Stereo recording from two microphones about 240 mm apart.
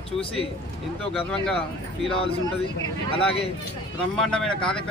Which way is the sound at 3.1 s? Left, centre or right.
Left.